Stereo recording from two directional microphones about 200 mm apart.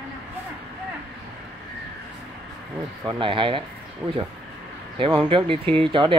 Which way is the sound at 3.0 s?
25° right (ahead or behind).